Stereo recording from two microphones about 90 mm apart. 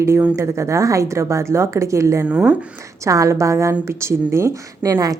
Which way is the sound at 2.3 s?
15° right (ahead or behind).